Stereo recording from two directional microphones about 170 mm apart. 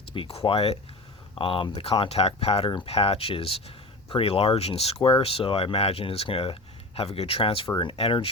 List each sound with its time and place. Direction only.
0.1 s speech: 35° left (ahead or behind)